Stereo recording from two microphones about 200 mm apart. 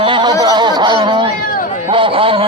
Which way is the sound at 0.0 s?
25° right (ahead or behind).